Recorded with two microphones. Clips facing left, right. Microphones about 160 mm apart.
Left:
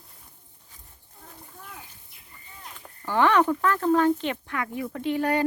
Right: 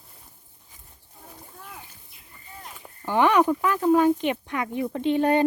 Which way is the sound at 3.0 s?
15° right (ahead or behind).